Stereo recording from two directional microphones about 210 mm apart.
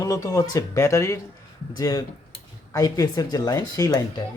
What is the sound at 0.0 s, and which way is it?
Speech, 15° left (ahead or behind).